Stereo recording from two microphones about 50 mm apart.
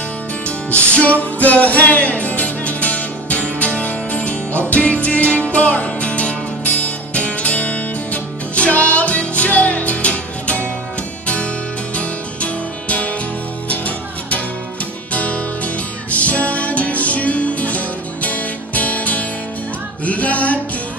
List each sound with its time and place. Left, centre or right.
0.7 s music: left
11.9 s music: left